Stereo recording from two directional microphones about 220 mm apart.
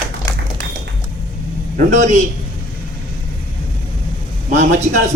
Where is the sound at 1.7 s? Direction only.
35° right (ahead or behind).